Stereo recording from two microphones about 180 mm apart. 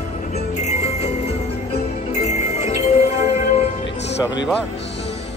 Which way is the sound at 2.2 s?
40° left (ahead or behind).